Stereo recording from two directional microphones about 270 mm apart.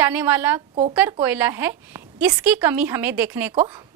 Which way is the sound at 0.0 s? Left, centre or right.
Centre.